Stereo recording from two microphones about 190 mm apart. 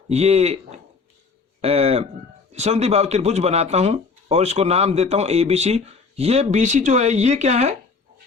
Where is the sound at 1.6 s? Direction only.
30° right (ahead or behind).